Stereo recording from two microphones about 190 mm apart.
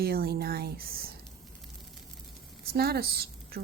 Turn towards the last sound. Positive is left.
turn(degrees=-55)  # may be behind; listen again after turning